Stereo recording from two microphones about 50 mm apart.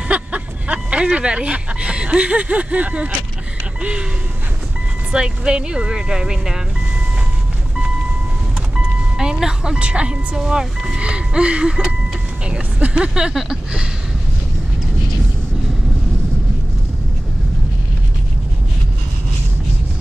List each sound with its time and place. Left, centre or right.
0.1 s vehicle: right
1.1 s speech: centre
5.1 s speech: centre
8.7 s speech: centre
11.0 s speech: right
13.3 s speech: centre